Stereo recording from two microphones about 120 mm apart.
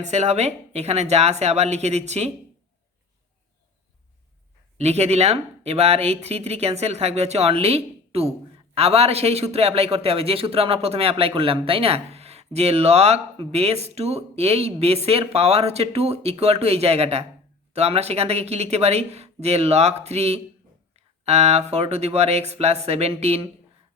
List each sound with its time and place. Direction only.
0.0 s a man's voice: 70° right (ahead or behind)
4.8 s a man's voice: 60° right (ahead or behind)